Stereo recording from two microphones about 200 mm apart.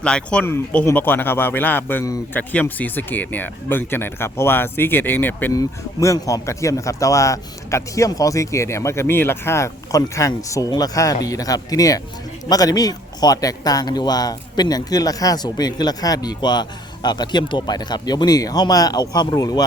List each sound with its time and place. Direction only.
0.0 s a man's voice: 5° left (ahead or behind)